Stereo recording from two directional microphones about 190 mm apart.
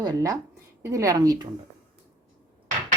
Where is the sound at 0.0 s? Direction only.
20° right (ahead or behind).